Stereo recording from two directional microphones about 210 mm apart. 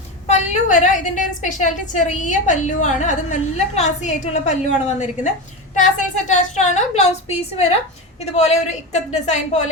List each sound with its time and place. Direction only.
0.3 s a woman's voice: 35° left (ahead or behind)